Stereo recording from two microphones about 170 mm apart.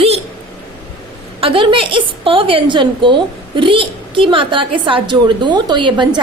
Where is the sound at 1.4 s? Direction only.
30° right (ahead or behind).